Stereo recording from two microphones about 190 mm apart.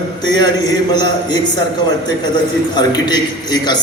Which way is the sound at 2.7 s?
20° left (ahead or behind).